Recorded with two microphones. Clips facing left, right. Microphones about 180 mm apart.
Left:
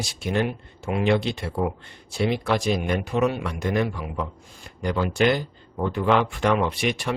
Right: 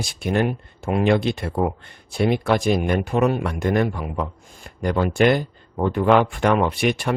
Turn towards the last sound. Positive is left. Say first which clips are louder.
# right 4 dB
turn(degrees=-50)  # may be behind; listen again after turning